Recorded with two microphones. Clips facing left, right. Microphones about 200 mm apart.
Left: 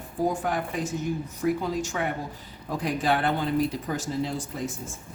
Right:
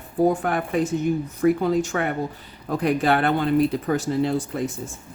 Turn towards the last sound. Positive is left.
turn(degrees=-60)  # may be behind; listen again after turning